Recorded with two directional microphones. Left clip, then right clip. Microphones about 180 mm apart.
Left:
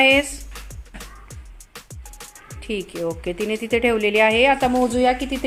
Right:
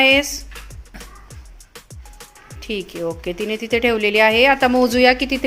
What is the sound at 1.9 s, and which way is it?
Speech, centre (ahead or behind).